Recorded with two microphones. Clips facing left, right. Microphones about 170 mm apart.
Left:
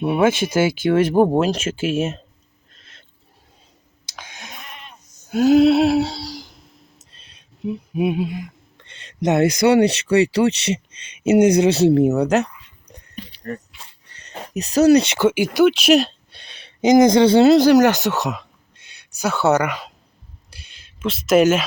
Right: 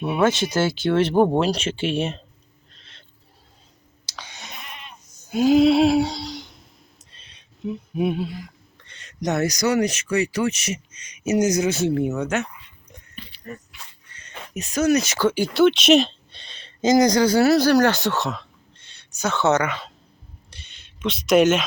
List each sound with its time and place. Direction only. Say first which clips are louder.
0.8 s speech: left 1 dB; 10° left (ahead or behind)
5.3 s a sound: left 3 dB; 5° left (ahead or behind); by 10.8 s 30° left (ahead or behind)
11.3 s speech: left 6 dB; 30° left (ahead or behind)
12.9 s dog: left 6 dB; 35° left (ahead or behind)
13.7 s a sound: even; 30° left (ahead or behind)
15.2 s speech: left 3 dB; 20° left (ahead or behind)
15.5 s speech: even; 5° left (ahead or behind)
21.0 s speech: left 2 dB; centre (ahead or behind)